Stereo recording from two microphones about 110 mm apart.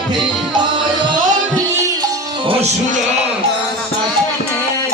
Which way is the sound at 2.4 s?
75° right (ahead or behind).